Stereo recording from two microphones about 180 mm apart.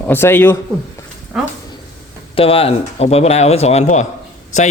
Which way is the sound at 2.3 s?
30° left (ahead or behind).